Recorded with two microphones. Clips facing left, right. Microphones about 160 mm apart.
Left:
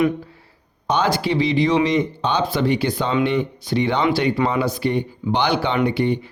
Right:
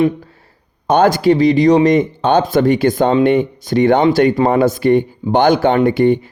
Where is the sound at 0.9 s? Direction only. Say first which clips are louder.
Right 9 dB; 50° right (ahead or behind).